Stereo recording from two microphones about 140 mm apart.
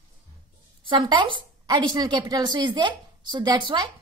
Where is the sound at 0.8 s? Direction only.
35° right (ahead or behind).